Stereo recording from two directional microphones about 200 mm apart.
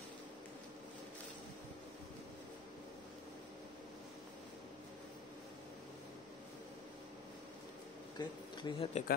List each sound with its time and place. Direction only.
8.2 s speech: 25° left (ahead or behind)